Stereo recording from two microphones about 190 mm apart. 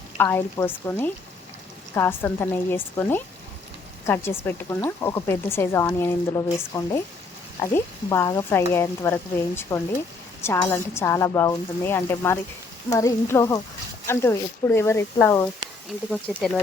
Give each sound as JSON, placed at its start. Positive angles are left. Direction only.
{"t": 0.2, "sound": "speech", "side_deg": 10}
{"t": 16.3, "sound": "speech", "side_deg": 0}